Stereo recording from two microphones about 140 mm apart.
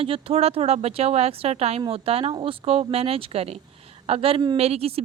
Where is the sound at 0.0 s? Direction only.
45° right (ahead or behind).